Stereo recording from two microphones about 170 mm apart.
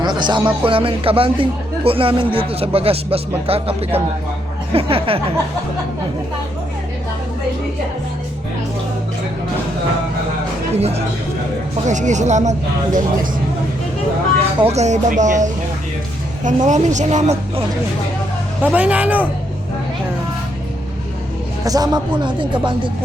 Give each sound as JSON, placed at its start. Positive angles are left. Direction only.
{"t": 0.0, "sound": "music", "side_deg": -25}
{"t": 0.6, "sound": "speech", "side_deg": -30}
{"t": 11.9, "sound": "a woman's voice", "side_deg": -45}
{"t": 14.7, "sound": "a woman's voice", "side_deg": -40}
{"t": 18.6, "sound": "speech", "side_deg": -10}
{"t": 21.6, "sound": "speech", "side_deg": -20}